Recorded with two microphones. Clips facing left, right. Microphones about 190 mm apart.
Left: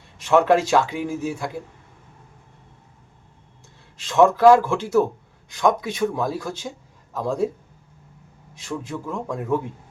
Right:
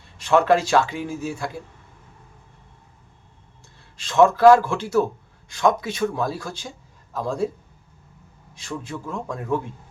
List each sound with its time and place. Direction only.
0.4 s speech: 20° left (ahead or behind)
4.0 s a man's voice: 15° left (ahead or behind)
8.8 s speech: 15° left (ahead or behind)